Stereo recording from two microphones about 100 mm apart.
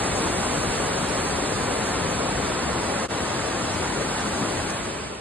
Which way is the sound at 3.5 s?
15° left (ahead or behind).